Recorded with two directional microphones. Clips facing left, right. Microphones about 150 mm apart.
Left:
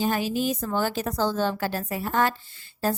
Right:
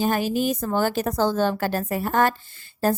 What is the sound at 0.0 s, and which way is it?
A woman's voice, 50° right (ahead or behind).